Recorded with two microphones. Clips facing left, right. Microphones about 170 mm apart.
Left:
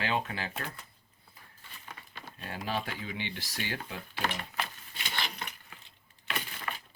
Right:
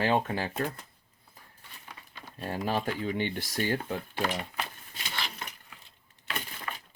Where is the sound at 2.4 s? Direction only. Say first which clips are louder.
Right 5 dB; 45° right (ahead or behind).